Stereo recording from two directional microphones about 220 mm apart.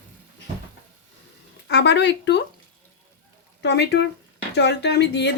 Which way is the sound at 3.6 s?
50° left (ahead or behind).